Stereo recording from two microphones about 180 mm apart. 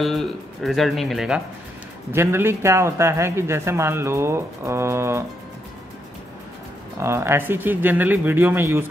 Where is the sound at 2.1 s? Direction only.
15° right (ahead or behind).